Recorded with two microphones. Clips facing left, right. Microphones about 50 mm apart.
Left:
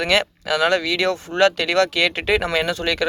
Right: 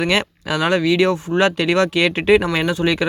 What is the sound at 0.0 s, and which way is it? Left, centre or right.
Speech, right.